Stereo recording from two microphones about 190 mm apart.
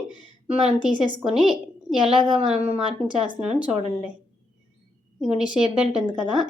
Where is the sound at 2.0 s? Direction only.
25° right (ahead or behind).